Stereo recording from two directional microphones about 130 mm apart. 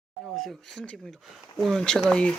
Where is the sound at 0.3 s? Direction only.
Centre (ahead or behind).